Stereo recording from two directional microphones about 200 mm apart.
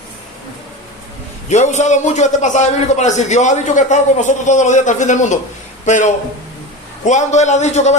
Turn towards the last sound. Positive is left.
turn(degrees=35)  # may be behind; listen again after turning